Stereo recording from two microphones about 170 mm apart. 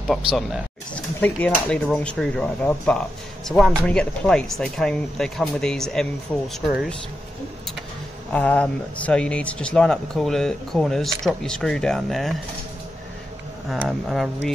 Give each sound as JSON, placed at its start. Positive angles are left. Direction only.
{"t": 0.0, "sound": "speech", "side_deg": 0}
{"t": 8.3, "sound": "speech", "side_deg": 5}
{"t": 13.7, "sound": "speech", "side_deg": 0}